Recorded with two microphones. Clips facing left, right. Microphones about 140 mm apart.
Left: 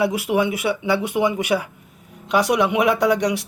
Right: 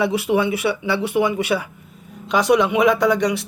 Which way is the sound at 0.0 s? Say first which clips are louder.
Right 1 dB; 15° left (ahead or behind).